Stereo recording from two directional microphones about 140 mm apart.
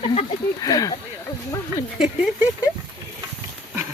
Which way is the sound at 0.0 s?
45° left (ahead or behind).